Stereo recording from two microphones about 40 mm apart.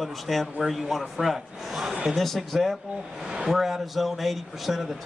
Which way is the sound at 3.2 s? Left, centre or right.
Right.